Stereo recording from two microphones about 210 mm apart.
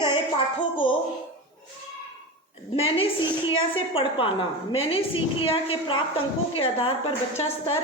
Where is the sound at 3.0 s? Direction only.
25° left (ahead or behind).